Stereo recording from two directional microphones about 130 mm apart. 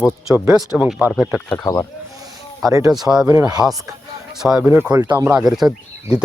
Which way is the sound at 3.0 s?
5° right (ahead or behind).